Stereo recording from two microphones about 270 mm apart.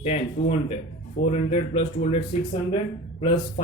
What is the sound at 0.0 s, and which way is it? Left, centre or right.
A man's voice, left.